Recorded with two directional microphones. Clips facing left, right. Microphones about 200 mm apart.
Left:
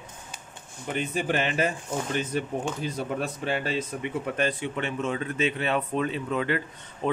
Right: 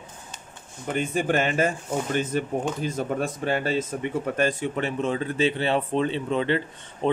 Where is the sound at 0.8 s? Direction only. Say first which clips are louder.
Right 3 dB; 45° right (ahead or behind).